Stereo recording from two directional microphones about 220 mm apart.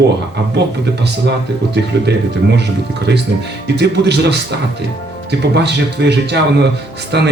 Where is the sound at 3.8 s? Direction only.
50° right (ahead or behind).